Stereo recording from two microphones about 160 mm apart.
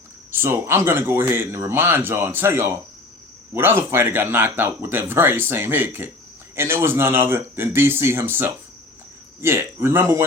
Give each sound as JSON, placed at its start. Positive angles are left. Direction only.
{"t": 0.3, "sound": "speech", "side_deg": -15}